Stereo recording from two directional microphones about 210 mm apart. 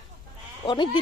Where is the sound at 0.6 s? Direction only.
20° left (ahead or behind).